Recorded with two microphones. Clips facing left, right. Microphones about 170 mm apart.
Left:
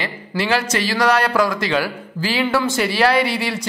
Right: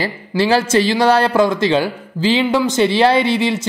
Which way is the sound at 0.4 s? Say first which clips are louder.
Right 6 dB; 30° right (ahead or behind).